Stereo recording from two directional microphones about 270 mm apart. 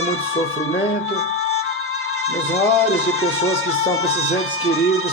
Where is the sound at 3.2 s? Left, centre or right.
Left.